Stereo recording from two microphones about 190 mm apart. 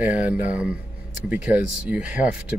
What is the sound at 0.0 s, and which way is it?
Speech, 10° right (ahead or behind).